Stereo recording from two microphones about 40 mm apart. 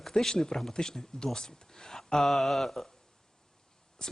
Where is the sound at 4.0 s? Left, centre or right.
Centre.